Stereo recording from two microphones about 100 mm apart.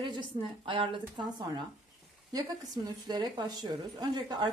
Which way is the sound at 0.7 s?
60° right (ahead or behind).